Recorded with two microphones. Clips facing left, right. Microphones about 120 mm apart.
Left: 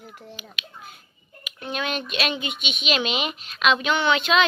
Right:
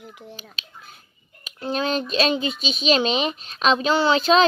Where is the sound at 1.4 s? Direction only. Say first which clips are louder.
Right 5 dB; 35° right (ahead or behind).